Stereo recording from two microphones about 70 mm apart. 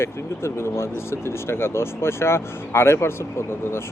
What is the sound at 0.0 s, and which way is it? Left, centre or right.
Speech, left.